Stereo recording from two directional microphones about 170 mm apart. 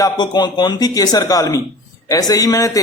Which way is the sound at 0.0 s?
25° left (ahead or behind).